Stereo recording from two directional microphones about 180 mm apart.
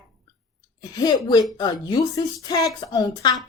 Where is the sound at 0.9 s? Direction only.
20° left (ahead or behind).